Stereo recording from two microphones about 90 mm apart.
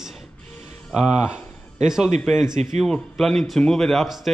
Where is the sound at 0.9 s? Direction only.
5° right (ahead or behind).